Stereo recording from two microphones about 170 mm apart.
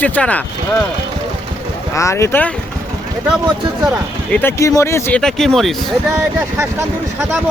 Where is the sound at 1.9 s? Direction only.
15° left (ahead or behind).